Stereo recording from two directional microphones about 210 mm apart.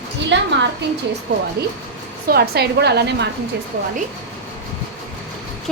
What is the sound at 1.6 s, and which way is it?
A woman's voice, 50° right (ahead or behind).